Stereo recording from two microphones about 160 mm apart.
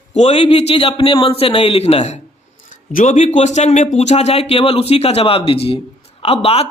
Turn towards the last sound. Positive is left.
turn(degrees=40)  # may be behind; listen again after turning